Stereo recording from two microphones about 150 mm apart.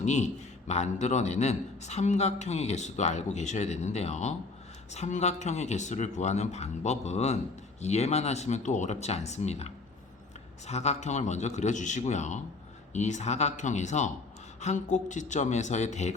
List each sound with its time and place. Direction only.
0.0 s a man's voice: 50° left (ahead or behind)